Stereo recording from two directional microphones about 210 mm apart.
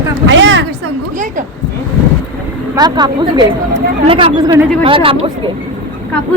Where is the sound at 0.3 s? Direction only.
60° right (ahead or behind).